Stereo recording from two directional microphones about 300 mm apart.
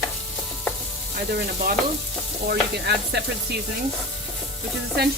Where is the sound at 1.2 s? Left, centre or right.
Right.